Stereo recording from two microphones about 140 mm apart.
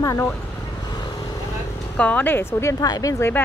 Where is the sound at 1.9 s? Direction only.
10° left (ahead or behind).